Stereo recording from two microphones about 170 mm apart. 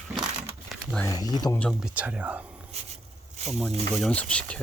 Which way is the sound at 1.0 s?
20° left (ahead or behind).